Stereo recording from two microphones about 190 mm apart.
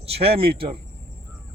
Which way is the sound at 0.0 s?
30° right (ahead or behind).